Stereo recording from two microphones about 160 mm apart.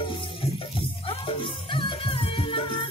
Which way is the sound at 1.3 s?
35° left (ahead or behind).